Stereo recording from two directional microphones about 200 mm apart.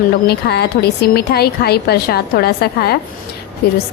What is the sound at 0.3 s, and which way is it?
Speech, 55° left (ahead or behind).